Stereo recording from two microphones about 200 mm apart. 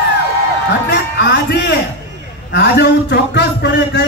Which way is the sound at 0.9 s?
60° left (ahead or behind).